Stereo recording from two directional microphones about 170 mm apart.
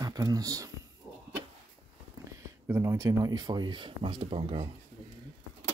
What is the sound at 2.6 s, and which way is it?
Speech, 15° right (ahead or behind).